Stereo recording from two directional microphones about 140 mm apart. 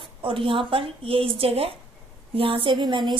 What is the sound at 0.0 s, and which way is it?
A woman's voice, 40° right (ahead or behind).